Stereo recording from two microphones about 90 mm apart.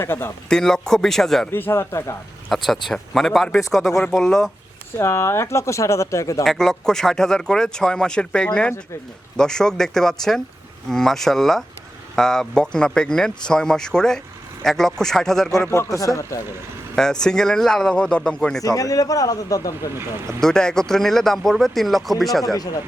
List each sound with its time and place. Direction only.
0.0 s speech: 25° left (ahead or behind)
0.4 s speech: 5° left (ahead or behind)
1.5 s speech: 25° left (ahead or behind)
2.6 s speech: centre (ahead or behind)
4.9 s speech: 30° left (ahead or behind)
6.4 s speech: 5° left (ahead or behind)
15.7 s speech: 35° left (ahead or behind)
16.9 s speech: 5° left (ahead or behind)
18.6 s speech: 40° left (ahead or behind)
20.0 s speech: 30° right (ahead or behind)
20.4 s speech: 5° left (ahead or behind)
22.5 s speech: 45° left (ahead or behind)